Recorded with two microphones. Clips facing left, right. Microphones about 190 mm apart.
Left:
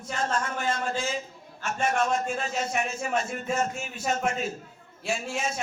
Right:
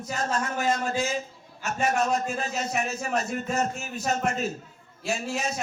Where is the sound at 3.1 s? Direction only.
40° right (ahead or behind).